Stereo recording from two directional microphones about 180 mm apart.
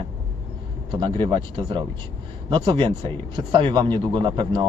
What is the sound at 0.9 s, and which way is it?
Speech, 25° right (ahead or behind).